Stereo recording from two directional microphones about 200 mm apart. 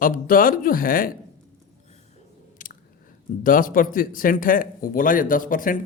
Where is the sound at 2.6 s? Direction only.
45° left (ahead or behind).